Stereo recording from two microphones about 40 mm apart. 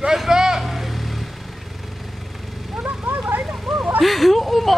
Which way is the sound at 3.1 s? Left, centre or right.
Right.